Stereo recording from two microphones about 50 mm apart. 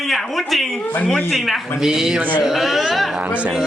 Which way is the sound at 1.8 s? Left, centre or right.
Centre.